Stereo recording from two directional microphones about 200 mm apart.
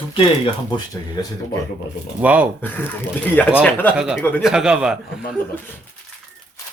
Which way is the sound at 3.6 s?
10° left (ahead or behind).